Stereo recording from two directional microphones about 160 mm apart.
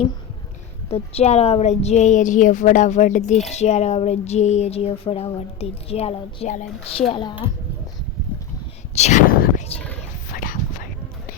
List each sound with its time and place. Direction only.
0.9 s a woman's voice: 40° left (ahead or behind)
7.1 s speech: 30° left (ahead or behind)
9.0 s a sound: 45° left (ahead or behind)
10.3 s dog: 60° left (ahead or behind)